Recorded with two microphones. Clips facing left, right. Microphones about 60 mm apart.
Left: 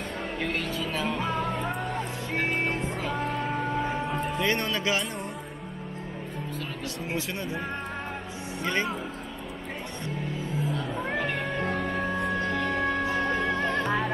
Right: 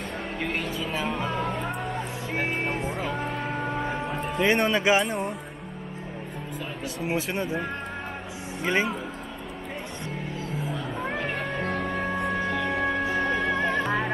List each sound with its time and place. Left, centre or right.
0.4 s music: centre
4.4 s speech: centre
7.1 s speech: centre
8.6 s speech: centre
10.7 s music: centre